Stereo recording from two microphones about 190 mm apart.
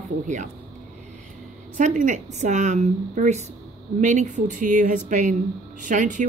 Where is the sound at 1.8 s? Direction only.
40° right (ahead or behind).